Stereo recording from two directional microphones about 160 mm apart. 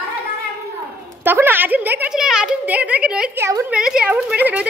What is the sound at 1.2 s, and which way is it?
Speech, 10° right (ahead or behind).